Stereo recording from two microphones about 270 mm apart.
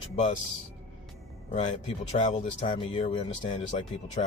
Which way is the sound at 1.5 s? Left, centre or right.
Left.